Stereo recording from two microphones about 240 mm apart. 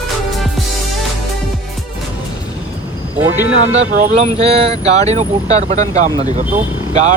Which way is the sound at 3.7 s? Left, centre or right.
Right.